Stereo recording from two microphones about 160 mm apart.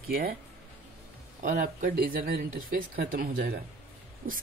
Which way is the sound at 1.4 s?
60° right (ahead or behind).